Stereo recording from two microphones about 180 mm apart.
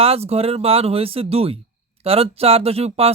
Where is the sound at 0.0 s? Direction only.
35° right (ahead or behind).